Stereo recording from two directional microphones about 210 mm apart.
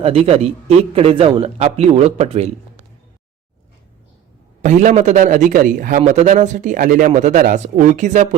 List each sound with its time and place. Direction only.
0.0 s a man's voice: 30° right (ahead or behind)
4.6 s speech: 35° right (ahead or behind)